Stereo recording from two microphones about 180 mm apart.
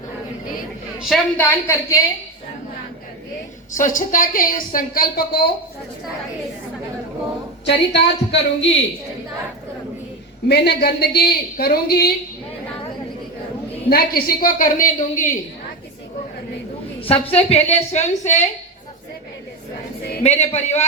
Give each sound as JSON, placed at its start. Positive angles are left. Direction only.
{"t": 0.9, "sound": "a woman's voice", "side_deg": 0}
{"t": 1.4, "sound": "a woman's voice", "side_deg": 15}
{"t": 3.7, "sound": "a woman's voice", "side_deg": 45}
{"t": 7.6, "sound": "a woman's voice", "side_deg": 70}
{"t": 10.5, "sound": "a woman's voice", "side_deg": 65}
{"t": 13.9, "sound": "a woman's voice", "side_deg": 55}
{"t": 17.1, "sound": "a woman's voice", "side_deg": 35}
{"t": 20.2, "sound": "a woman's voice", "side_deg": 40}